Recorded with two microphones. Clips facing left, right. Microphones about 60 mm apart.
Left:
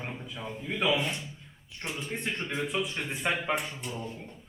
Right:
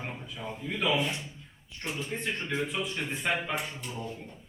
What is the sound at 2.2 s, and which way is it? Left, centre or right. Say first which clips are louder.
A man's voice: even; left.